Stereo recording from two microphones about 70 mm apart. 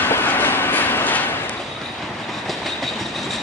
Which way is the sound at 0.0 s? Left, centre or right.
Left.